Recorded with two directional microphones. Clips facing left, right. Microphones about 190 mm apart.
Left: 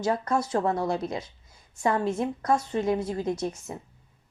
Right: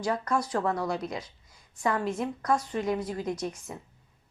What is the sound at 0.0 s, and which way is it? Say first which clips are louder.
A woman's voice: left 2 dB; 25° left (ahead or behind).